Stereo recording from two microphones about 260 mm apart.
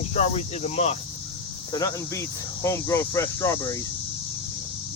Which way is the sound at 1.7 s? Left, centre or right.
Centre.